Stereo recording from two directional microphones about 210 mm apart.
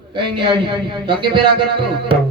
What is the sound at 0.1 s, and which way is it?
A man's voice, 25° right (ahead or behind).